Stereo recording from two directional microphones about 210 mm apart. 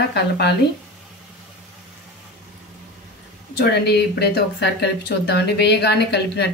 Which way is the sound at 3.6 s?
50° left (ahead or behind).